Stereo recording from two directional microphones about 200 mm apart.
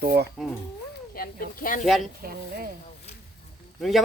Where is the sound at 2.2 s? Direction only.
45° right (ahead or behind).